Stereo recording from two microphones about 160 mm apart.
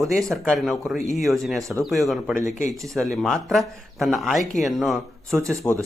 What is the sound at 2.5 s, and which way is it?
Speech, 50° left (ahead or behind).